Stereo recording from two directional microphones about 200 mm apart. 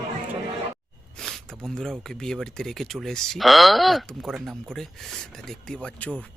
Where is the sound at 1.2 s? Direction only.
Centre (ahead or behind).